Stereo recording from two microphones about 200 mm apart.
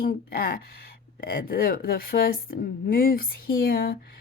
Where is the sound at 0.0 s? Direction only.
45° left (ahead or behind).